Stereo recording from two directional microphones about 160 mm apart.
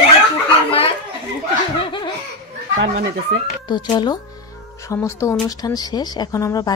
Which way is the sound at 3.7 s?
25° left (ahead or behind).